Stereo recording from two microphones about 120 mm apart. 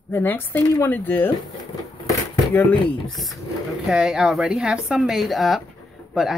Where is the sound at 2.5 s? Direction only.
15° left (ahead or behind).